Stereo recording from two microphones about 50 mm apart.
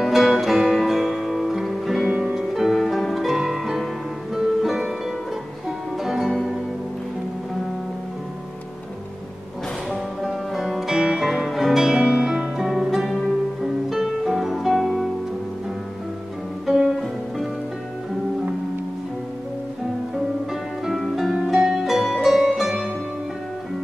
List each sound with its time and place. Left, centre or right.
0.0 s music: centre
6.0 s music: centre
9.8 s music: centre
16.6 s guitar: centre
21.0 s music: centre